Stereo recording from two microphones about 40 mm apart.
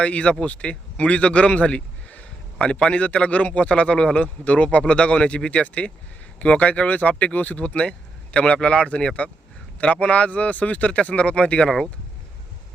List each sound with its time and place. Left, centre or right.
0.0 s speech: left